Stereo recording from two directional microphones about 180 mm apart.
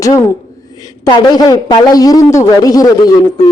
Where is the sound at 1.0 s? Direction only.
20° left (ahead or behind).